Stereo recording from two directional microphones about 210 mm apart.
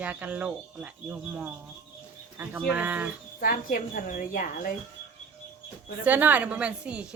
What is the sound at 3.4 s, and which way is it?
A woman's voice, 40° left (ahead or behind).